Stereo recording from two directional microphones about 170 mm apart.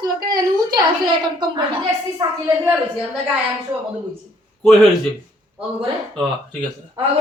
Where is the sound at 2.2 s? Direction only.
25° right (ahead or behind).